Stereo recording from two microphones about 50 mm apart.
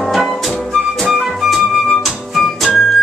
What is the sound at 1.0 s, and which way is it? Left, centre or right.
Music, centre.